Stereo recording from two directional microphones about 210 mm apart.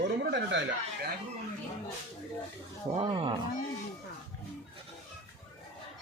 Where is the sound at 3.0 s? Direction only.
25° right (ahead or behind).